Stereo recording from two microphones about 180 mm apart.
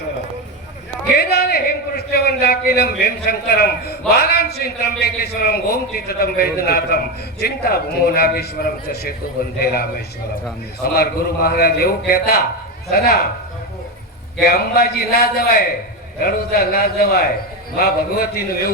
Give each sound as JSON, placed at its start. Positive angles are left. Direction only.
{"t": 1.2, "sound": "a man's voice", "side_deg": 65}
{"t": 10.9, "sound": "a man's voice", "side_deg": 60}
{"t": 14.4, "sound": "a man's voice", "side_deg": 60}